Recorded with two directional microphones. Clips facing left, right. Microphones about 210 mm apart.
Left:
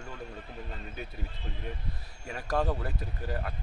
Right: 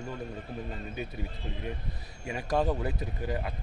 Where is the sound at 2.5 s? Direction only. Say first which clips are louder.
Right 2 dB; 20° right (ahead or behind).